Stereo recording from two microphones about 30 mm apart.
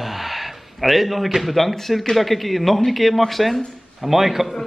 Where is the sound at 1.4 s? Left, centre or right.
Centre.